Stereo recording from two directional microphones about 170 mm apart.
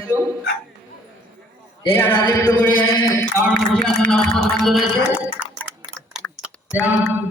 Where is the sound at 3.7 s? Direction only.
5° left (ahead or behind).